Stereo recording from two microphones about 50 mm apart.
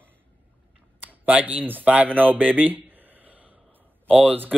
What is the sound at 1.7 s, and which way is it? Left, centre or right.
Speech, right.